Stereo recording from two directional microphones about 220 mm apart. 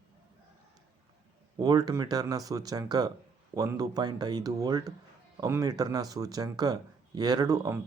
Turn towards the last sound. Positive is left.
turn(degrees=-15)  # may be behind; listen again after turning